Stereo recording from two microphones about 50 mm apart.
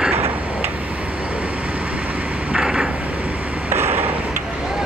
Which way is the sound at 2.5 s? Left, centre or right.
Centre.